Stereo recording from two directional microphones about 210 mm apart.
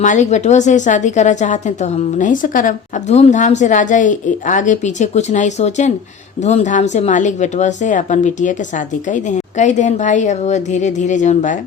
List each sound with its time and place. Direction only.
0.0 s a woman's voice: 35° left (ahead or behind)